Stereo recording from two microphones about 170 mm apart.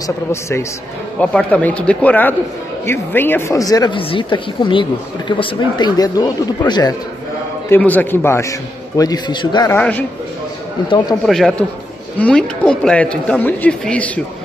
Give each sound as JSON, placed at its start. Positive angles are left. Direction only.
{"t": 0.0, "sound": "speech", "side_deg": 15}
{"t": 7.7, "sound": "speech", "side_deg": 10}
{"t": 9.7, "sound": "speech", "side_deg": 10}
{"t": 11.2, "sound": "a man's voice", "side_deg": 0}